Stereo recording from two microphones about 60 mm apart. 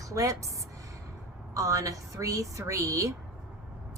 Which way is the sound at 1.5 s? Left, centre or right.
Right.